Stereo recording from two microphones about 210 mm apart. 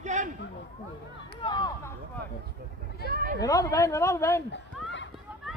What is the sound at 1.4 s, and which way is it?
Speech, 20° left (ahead or behind).